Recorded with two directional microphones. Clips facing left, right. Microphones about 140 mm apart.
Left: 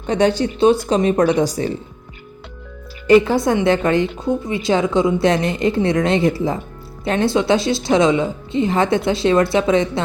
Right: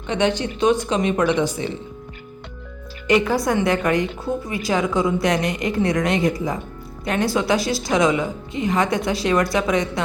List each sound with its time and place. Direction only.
0.1 s speech: 35° left (ahead or behind)
3.1 s a woman's voice: 30° left (ahead or behind)